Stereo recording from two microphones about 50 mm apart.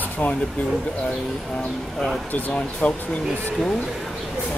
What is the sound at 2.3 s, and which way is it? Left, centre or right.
Speech, left.